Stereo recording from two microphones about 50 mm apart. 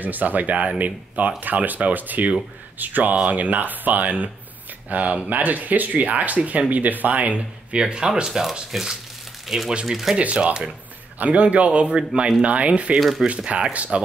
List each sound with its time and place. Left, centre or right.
0.0 s speech: right
7.8 s speech: centre
10.1 s a man's voice: right
13.0 s speech: centre
13.5 s a man's voice: right